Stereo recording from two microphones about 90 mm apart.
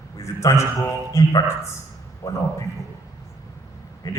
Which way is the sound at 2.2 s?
35° left (ahead or behind).